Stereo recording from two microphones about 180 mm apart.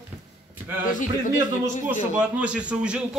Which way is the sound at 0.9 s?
45° left (ahead or behind).